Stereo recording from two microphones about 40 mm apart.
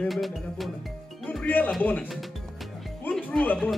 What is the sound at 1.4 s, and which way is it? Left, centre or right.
Speech, left.